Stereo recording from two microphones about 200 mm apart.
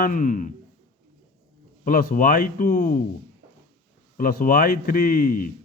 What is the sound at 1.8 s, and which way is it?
Speech, 45° left (ahead or behind).